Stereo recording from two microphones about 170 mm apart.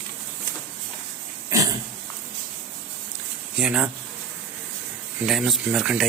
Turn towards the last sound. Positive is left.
turn(degrees=-5)  # may be behind; listen again after turning